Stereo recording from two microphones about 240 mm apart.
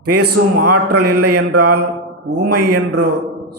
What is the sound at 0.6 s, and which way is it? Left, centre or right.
Speech, right.